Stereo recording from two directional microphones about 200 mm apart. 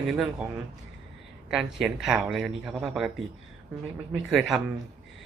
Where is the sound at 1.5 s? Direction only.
Centre (ahead or behind).